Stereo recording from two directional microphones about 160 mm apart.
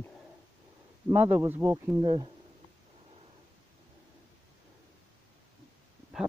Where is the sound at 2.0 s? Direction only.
25° right (ahead or behind).